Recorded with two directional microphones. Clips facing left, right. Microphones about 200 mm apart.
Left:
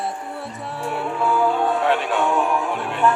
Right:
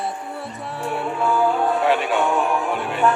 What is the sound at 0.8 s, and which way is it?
Speech, centre (ahead or behind).